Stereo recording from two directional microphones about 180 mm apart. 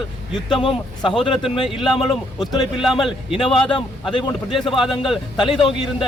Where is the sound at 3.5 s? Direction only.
30° left (ahead or behind).